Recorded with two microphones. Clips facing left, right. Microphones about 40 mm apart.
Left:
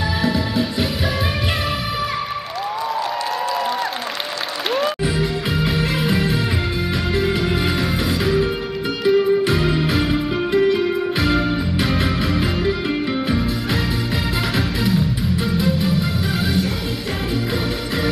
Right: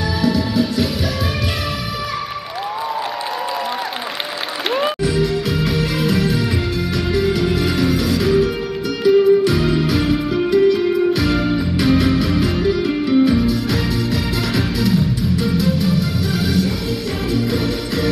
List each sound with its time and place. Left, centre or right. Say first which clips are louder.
0.2 s music: right 4 dB; centre
5.0 s music: right 3 dB; centre